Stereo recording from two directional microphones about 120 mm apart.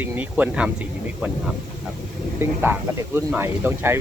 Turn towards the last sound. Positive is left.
turn(degrees=-20)  # may be behind; listen again after turning